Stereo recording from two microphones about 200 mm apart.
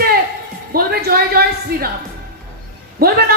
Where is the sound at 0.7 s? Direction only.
50° right (ahead or behind).